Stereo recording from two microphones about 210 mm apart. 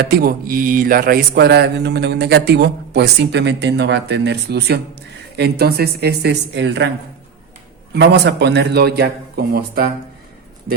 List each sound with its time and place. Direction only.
0.0 s mantra: 50° right (ahead or behind)
7.9 s mantra: 55° right (ahead or behind)